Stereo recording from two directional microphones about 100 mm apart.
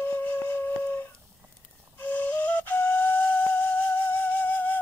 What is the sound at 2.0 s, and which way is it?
Flute, 15° left (ahead or behind).